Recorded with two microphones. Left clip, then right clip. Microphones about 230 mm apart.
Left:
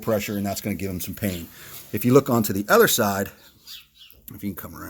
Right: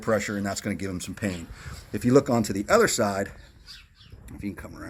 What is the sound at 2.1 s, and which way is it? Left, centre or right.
Speech, left.